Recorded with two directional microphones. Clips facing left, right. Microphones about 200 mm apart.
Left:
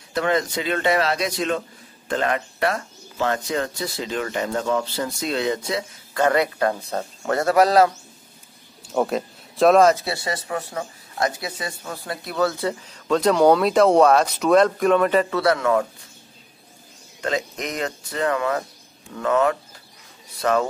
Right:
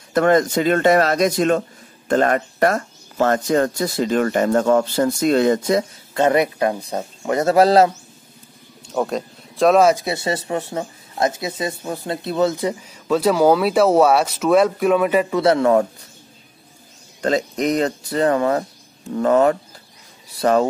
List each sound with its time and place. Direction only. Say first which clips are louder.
0.1 s speech: right 7 dB; 50° right (ahead or behind)
6.1 s speech: right 3 dB; 20° right (ahead or behind)
8.8 s speech: even; 5° left (ahead or behind)
9.8 s speech: right 2 dB; 15° right (ahead or behind)
15.4 s speech: right 5 dB; 25° right (ahead or behind)
17.2 s speech: right 6 dB; 35° right (ahead or behind)